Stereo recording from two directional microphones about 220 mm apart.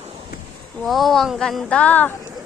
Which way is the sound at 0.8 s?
Centre (ahead or behind).